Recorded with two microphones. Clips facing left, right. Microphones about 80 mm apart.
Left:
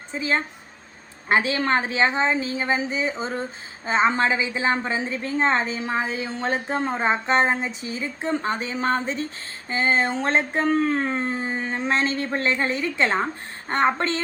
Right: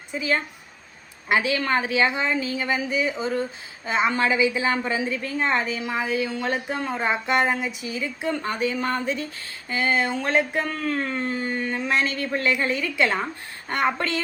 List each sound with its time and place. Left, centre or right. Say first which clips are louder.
0.1 s a woman's voice: even; left